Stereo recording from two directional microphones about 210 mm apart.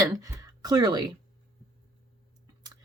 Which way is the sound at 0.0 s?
15° right (ahead or behind).